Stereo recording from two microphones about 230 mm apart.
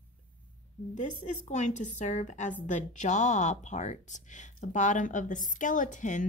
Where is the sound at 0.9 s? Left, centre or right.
Left.